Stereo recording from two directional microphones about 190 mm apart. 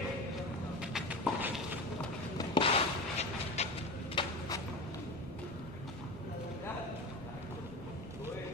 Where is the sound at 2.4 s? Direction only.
25° left (ahead or behind).